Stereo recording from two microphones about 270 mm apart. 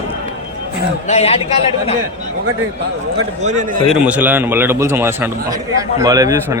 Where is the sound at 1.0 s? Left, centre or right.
Left.